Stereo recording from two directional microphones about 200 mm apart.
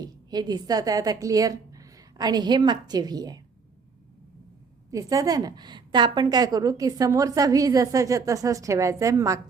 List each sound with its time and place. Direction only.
0.0 s a woman's voice: 20° right (ahead or behind)
4.9 s a woman's voice: 15° right (ahead or behind)